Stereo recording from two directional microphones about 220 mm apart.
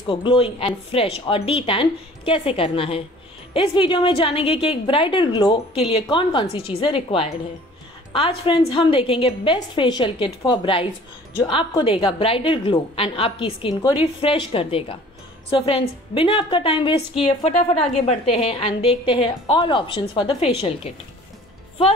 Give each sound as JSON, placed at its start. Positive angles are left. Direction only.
{"t": 0.0, "sound": "a woman's voice", "side_deg": 25}